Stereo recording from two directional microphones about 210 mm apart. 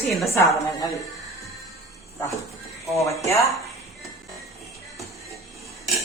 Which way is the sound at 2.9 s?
15° left (ahead or behind).